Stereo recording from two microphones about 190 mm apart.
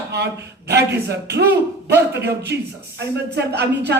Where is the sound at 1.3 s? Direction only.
60° right (ahead or behind).